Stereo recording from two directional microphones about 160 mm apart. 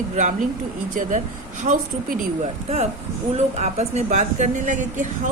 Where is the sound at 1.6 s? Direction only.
55° right (ahead or behind).